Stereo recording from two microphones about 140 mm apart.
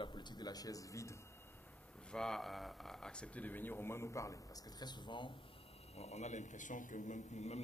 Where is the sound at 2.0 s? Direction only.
5° left (ahead or behind); by 5.3 s 35° left (ahead or behind).